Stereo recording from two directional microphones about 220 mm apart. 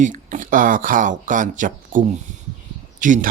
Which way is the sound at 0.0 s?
35° right (ahead or behind).